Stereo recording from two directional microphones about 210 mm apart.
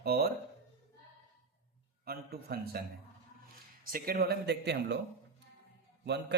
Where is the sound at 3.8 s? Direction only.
45° right (ahead or behind).